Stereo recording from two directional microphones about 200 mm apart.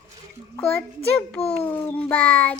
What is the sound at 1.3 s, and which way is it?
Speech, 30° left (ahead or behind).